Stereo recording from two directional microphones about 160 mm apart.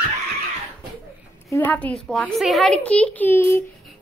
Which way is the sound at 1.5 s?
10° left (ahead or behind).